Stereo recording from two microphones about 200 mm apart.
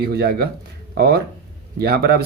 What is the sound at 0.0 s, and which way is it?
Speech, 50° right (ahead or behind).